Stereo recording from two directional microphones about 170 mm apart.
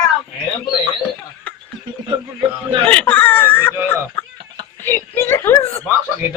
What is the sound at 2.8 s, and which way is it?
Baby cry, 10° left (ahead or behind).